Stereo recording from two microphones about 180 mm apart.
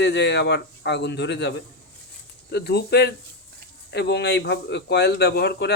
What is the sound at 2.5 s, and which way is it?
Speech, 65° left (ahead or behind).